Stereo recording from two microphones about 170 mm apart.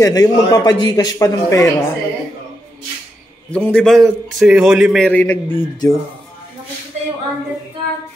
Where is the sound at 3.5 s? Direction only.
5° left (ahead or behind).